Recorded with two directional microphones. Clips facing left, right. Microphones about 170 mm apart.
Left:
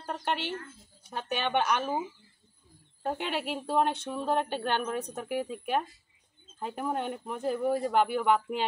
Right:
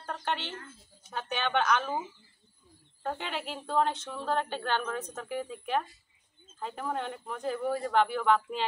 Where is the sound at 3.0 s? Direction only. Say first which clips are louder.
Left 3 dB; 10° left (ahead or behind).